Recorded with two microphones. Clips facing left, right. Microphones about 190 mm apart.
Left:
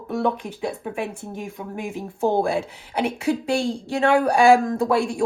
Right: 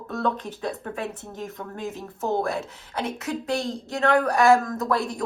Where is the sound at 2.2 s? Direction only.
30° left (ahead or behind).